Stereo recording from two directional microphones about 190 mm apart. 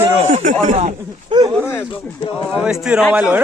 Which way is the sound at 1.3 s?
25° right (ahead or behind).